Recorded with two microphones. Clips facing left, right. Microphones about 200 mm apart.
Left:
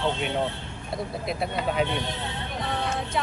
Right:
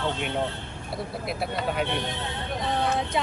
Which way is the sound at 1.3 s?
5° right (ahead or behind).